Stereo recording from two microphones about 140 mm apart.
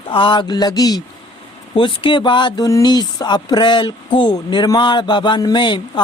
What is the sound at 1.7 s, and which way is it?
Speech, 35° left (ahead or behind).